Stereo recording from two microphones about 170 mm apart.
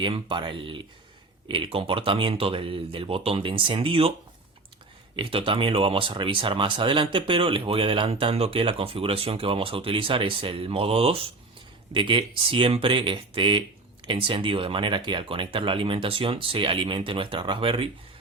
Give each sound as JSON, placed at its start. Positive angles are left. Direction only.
{"t": 0.0, "sound": "speech", "side_deg": -30}
{"t": 5.1, "sound": "speech", "side_deg": -30}